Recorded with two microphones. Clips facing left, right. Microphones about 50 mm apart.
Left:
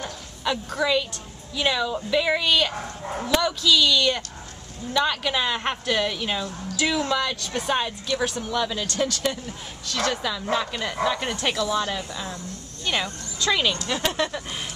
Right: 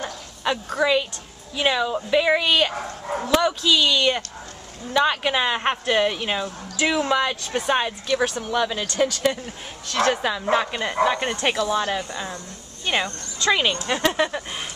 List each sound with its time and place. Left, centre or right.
0.0 s a sound: centre
0.7 s a woman's voice: centre
11.5 s a woman's voice: centre
12.0 s speech: centre
12.9 s a woman's voice: right